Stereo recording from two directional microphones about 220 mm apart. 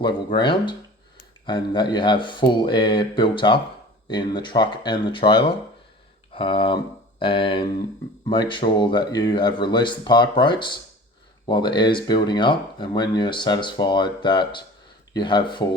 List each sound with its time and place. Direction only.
0.0 s speech: 20° left (ahead or behind)